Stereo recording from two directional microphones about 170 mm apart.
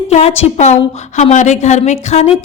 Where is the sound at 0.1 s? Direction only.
40° left (ahead or behind).